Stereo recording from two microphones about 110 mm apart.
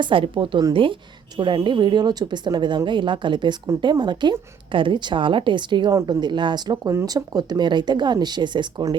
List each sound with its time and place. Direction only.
0.0 s speech: 50° right (ahead or behind)